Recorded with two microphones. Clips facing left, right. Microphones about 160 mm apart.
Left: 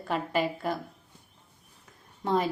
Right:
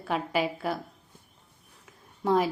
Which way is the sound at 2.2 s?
5° right (ahead or behind).